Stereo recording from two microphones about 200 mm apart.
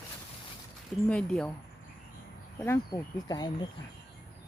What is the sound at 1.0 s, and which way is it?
Speech, 5° left (ahead or behind).